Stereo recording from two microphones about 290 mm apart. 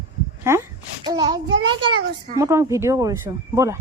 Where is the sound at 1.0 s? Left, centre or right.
Centre.